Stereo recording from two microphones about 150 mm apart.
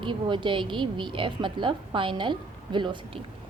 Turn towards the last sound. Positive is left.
turn(degrees=-30)  # may be behind; listen again after turning